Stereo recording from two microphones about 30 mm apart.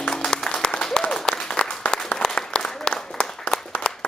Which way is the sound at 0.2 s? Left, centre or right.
Left.